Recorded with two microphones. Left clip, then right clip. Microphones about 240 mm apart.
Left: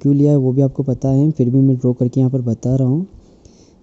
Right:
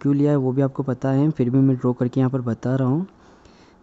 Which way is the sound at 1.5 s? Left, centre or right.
Right.